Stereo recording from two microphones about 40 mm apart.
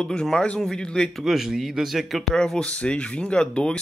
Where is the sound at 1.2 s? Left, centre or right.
Centre.